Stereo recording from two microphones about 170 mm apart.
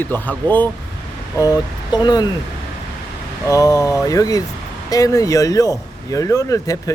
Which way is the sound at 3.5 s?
20° left (ahead or behind).